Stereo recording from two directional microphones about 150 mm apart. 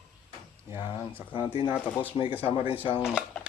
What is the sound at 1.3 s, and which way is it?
Speech, 35° left (ahead or behind).